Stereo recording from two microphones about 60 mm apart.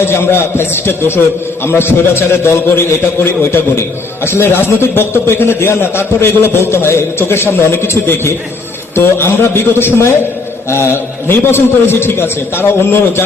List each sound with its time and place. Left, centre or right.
0.0 s a man's voice: left